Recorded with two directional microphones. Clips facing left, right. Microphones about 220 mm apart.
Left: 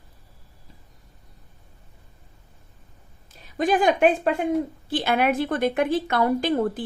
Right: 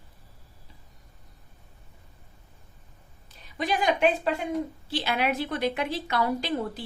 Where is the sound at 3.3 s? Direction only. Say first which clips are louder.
Left 7 dB; 50° left (ahead or behind).